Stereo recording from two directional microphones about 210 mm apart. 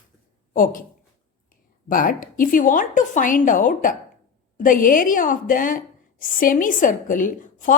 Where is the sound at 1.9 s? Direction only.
40° left (ahead or behind).